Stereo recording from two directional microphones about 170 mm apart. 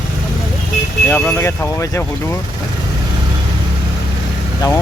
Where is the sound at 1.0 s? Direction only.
10° left (ahead or behind).